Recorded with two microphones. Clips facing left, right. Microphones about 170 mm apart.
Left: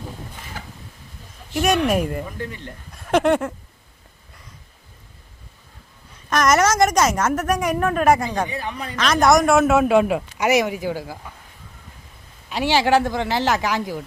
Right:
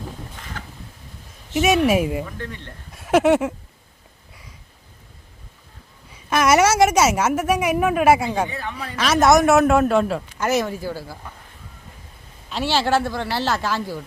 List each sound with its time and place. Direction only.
0.6 s chicken: 10° left (ahead or behind)
1.5 s speech: 5° right (ahead or behind)
6.3 s a woman's voice: 10° right (ahead or behind)
8.4 s a man's voice: 15° left (ahead or behind)
9.0 s a man's voice: 5° right (ahead or behind); by 11.2 s 15° left (ahead or behind)
12.5 s a man's voice: 15° left (ahead or behind)